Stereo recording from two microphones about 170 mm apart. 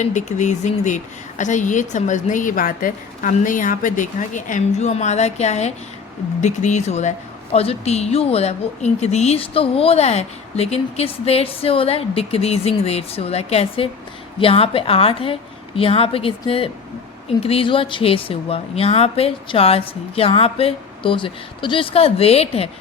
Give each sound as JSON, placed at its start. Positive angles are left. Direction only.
{"t": 0.0, "sound": "speech", "side_deg": 45}